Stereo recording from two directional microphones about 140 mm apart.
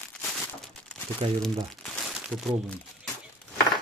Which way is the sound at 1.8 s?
Centre (ahead or behind).